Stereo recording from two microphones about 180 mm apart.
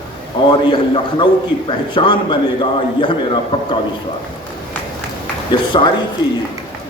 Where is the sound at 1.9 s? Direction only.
25° left (ahead or behind).